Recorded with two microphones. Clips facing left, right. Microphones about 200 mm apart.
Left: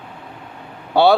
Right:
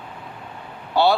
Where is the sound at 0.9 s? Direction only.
60° left (ahead or behind).